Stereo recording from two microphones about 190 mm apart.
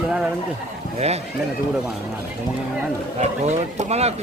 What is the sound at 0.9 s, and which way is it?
Speech, 35° right (ahead or behind).